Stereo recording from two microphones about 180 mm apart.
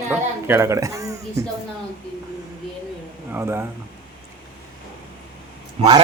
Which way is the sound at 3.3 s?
15° right (ahead or behind).